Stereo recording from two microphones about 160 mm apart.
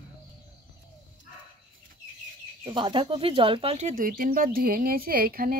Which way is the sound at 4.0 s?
60° right (ahead or behind).